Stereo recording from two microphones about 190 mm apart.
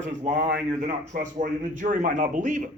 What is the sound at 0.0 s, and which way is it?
A man's voice, 40° right (ahead or behind).